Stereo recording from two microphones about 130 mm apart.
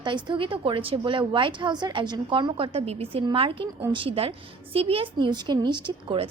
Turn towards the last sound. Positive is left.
turn(degrees=-40)  # may be behind; listen again after turning